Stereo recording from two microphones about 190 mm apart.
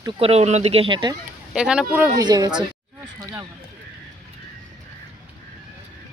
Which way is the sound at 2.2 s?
20° right (ahead or behind).